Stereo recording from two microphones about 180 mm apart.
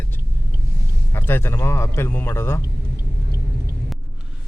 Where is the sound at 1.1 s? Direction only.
10° left (ahead or behind).